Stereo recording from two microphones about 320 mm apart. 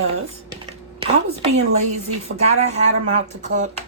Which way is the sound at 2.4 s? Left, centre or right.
Right.